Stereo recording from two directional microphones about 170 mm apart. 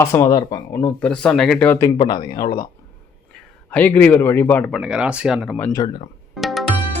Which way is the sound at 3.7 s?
10° left (ahead or behind).